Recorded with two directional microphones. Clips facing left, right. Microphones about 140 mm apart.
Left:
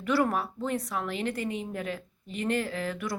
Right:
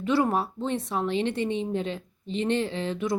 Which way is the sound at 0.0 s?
25° right (ahead or behind).